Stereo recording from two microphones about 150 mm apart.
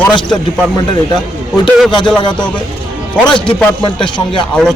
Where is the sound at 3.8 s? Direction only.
30° left (ahead or behind).